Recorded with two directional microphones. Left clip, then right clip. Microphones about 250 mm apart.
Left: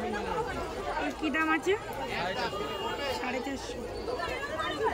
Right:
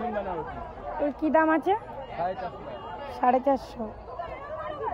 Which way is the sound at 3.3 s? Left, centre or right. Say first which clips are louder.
Right 11 dB; centre.